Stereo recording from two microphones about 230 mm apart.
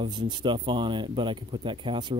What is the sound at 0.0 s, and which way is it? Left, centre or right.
Speech, centre.